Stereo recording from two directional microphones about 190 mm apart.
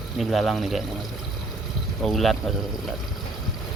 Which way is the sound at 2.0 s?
Centre (ahead or behind).